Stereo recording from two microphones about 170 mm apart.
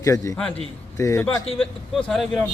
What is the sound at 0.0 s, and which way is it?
A man's voice, 20° left (ahead or behind).